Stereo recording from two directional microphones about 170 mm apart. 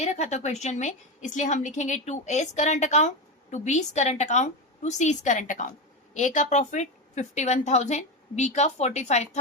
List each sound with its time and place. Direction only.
0.0 s a woman's voice: 40° left (ahead or behind)